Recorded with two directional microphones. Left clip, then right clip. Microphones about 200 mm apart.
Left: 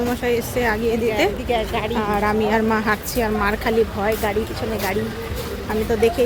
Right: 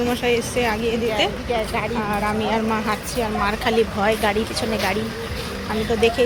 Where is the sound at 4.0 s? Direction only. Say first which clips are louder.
Right 2 dB; 5° left (ahead or behind).